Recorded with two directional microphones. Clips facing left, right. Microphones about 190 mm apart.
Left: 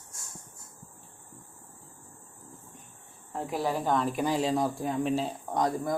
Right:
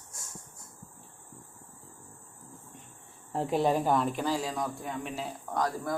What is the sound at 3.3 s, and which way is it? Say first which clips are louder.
Speech: right 4 dB; 25° right (ahead or behind).